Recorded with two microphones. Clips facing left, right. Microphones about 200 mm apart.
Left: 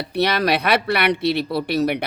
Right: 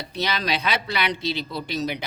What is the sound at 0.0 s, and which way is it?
Speech, 60° left (ahead or behind).